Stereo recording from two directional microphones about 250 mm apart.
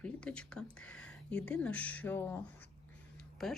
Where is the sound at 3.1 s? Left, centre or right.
Centre.